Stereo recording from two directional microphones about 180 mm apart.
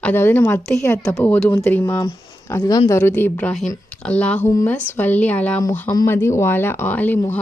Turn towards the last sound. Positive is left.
turn(degrees=10)  # may be behind; listen again after turning